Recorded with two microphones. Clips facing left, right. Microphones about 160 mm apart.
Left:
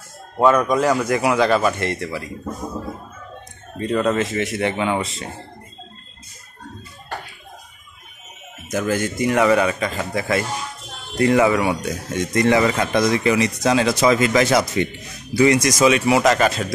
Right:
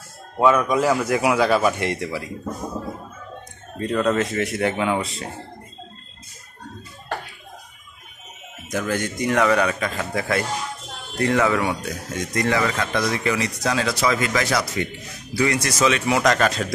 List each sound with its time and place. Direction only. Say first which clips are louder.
0.4 s a man's voice: left 2 dB; 5° right (ahead or behind)
3.7 s a man's voice: left 1 dB; centre (ahead or behind)
8.7 s a man's voice: left 3 dB; 5° left (ahead or behind)
12.1 s speech: left 5 dB; 20° left (ahead or behind); by 16.6 s 5° left (ahead or behind)